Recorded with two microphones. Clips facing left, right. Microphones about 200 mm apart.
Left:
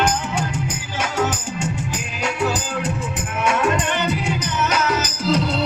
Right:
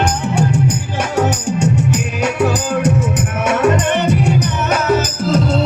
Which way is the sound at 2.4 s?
50° right (ahead or behind).